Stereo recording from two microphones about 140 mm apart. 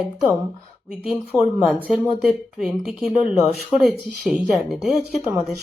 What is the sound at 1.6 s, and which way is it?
Speech, centre (ahead or behind).